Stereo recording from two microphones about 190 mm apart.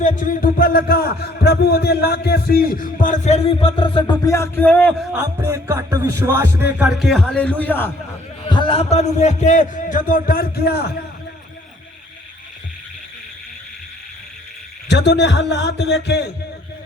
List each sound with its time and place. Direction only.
0.0 s a man's voice: 40° left (ahead or behind); by 5.0 s 10° left (ahead or behind)
5.1 s music: 15° right (ahead or behind); by 7.9 s 10° left (ahead or behind)
8.4 s a man's voice: 25° left (ahead or behind); by 10.8 s 55° left (ahead or behind)
14.8 s a man's voice: 65° left (ahead or behind)